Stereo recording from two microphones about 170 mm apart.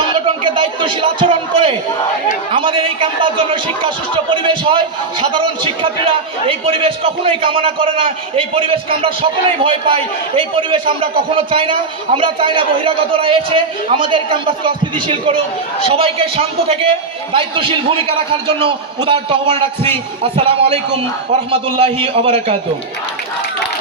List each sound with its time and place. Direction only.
0.1 s a man's voice: 30° right (ahead or behind)